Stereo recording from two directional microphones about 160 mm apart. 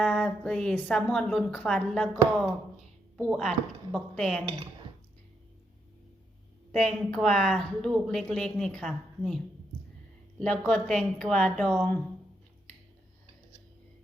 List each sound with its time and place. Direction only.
0.0 s a woman's voice: 5° left (ahead or behind)
4.4 s speech: 30° right (ahead or behind)
6.7 s a woman's voice: 5° left (ahead or behind)
10.4 s a woman's voice: 5° left (ahead or behind)